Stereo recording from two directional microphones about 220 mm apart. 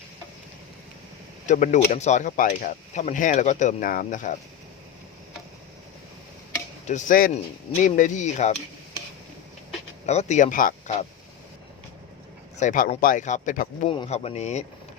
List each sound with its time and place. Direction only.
1.5 s speech: 35° left (ahead or behind)
6.8 s speech: 35° left (ahead or behind)
10.1 s speech: 30° left (ahead or behind)
12.5 s speech: 35° left (ahead or behind)
13.9 s speech: 25° left (ahead or behind)